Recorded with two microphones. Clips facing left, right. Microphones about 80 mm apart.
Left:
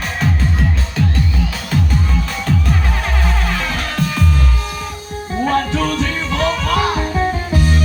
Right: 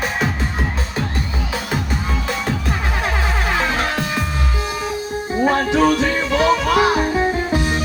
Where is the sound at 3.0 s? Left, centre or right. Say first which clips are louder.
Right 1 dB; centre.